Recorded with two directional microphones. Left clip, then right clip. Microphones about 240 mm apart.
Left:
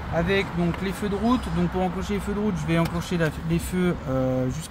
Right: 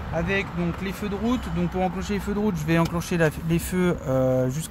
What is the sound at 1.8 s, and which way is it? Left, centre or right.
Speech, right.